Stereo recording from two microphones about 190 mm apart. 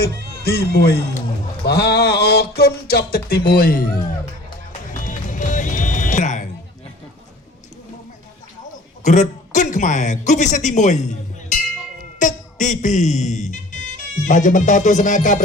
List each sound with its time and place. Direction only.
0.0 s speech: 55° left (ahead or behind)
1.6 s a sound: 60° left (ahead or behind)
2.6 s speech: 55° left (ahead or behind)
4.9 s music: 45° left (ahead or behind)
9.0 s a man's voice: 40° left (ahead or behind)